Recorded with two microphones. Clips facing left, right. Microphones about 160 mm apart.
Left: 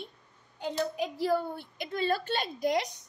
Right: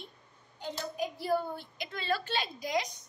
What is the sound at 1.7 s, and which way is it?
A woman's voice, 50° left (ahead or behind).